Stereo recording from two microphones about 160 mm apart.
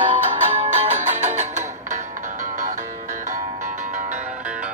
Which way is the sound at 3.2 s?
50° right (ahead or behind).